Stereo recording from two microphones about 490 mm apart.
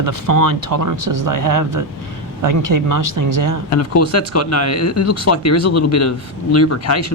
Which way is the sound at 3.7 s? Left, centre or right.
Left.